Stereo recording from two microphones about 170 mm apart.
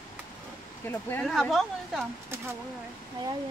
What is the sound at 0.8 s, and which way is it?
Speech, 15° left (ahead or behind).